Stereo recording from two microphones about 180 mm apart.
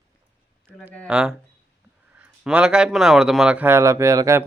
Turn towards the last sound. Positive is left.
turn(degrees=-15)  # may be behind; listen again after turning